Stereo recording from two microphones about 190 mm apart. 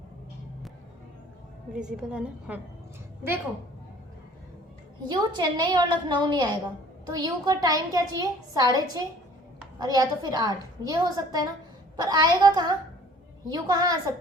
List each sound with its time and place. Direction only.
1.7 s a woman's voice: 5° right (ahead or behind)
5.0 s a woman's voice: 25° right (ahead or behind)